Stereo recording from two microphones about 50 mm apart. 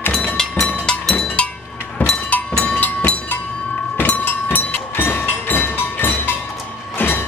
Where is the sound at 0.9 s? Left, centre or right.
Centre.